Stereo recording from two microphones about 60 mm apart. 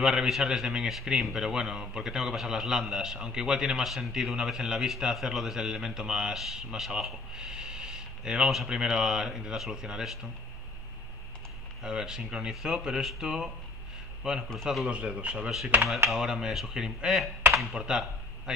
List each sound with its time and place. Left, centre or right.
0.0 s a man's voice: centre
11.8 s a man's voice: centre
14.9 s a man's voice: centre